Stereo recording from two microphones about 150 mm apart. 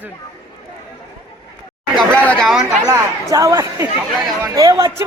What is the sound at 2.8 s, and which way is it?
A man's voice, 20° right (ahead or behind).